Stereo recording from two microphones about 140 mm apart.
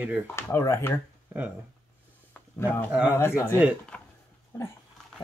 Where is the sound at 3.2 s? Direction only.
15° left (ahead or behind).